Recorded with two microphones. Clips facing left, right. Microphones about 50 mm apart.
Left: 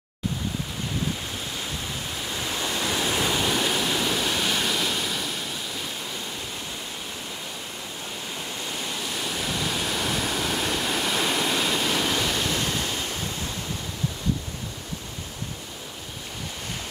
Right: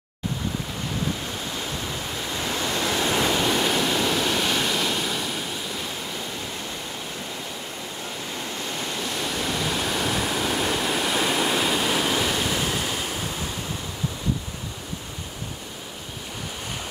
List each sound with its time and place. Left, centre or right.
2.2 s waves: centre
8.7 s waterfall: centre